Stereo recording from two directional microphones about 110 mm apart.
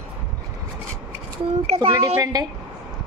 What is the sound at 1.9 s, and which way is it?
Speech, 30° right (ahead or behind).